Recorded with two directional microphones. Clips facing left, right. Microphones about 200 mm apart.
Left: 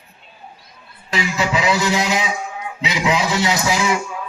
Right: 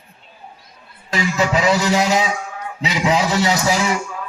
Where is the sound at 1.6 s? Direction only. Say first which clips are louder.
Right 2 dB; 40° right (ahead or behind).